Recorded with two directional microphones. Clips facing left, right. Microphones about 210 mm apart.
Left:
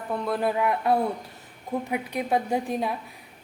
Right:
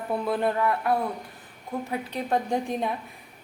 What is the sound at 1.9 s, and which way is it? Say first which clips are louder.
A woman's voice: left 1 dB; 10° left (ahead or behind).